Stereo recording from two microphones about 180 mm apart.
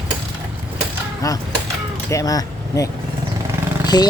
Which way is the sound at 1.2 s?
20° left (ahead or behind).